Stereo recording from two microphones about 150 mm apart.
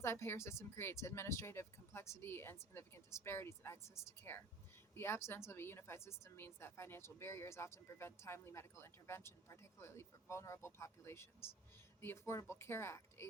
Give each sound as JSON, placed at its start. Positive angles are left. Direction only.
{"t": 0.0, "sound": "a woman's voice", "side_deg": 15}